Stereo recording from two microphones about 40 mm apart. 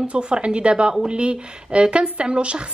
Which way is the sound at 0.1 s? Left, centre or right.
Right.